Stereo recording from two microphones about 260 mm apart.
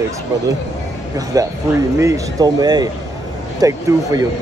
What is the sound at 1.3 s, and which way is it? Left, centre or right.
Speech, centre.